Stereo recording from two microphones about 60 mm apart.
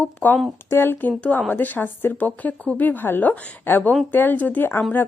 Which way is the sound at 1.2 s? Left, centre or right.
Left.